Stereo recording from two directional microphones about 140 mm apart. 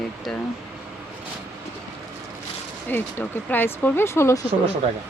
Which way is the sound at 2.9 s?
15° left (ahead or behind).